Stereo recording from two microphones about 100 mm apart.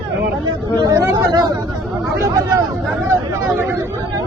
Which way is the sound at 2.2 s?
30° right (ahead or behind).